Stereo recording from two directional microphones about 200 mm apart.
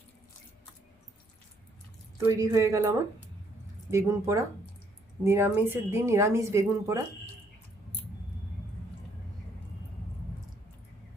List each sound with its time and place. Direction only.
2.4 s speech: 15° right (ahead or behind)